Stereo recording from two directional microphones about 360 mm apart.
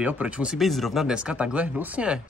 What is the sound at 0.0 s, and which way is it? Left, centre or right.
A man's voice, centre.